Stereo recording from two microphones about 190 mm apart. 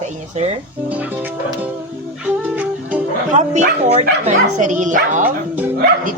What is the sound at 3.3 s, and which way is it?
Speech, 40° right (ahead or behind).